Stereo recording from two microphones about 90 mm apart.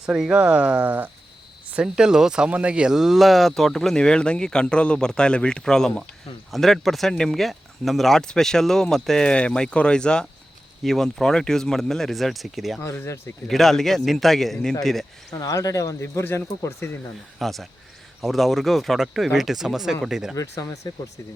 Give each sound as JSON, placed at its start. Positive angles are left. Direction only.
{"t": 0.0, "sound": "speech", "side_deg": -10}
{"t": 1.7, "sound": "speech", "side_deg": -10}
{"t": 12.8, "sound": "speech", "side_deg": 30}
{"t": 13.5, "sound": "speech", "side_deg": 5}
{"t": 15.3, "sound": "speech", "side_deg": 45}
{"t": 17.4, "sound": "speech", "side_deg": 0}
{"t": 20.3, "sound": "speech", "side_deg": 40}